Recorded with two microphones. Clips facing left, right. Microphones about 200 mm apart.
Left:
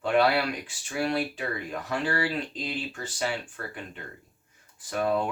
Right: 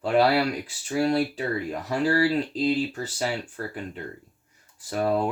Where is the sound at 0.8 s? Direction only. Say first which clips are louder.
Right 5 dB; 35° right (ahead or behind).